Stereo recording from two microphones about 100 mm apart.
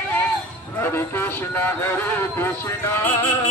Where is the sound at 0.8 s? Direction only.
25° left (ahead or behind).